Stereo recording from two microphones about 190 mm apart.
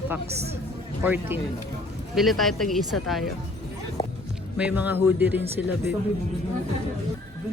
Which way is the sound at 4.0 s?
25° left (ahead or behind).